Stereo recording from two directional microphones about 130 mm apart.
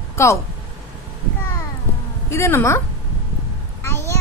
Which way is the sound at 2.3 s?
20° left (ahead or behind).